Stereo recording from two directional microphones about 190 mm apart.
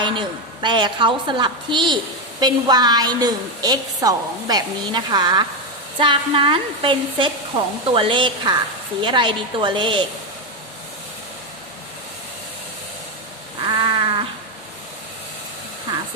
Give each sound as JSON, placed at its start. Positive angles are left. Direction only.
{"t": 0.0, "sound": "a woman's voice", "side_deg": -25}
{"t": 13.6, "sound": "a woman's voice", "side_deg": -25}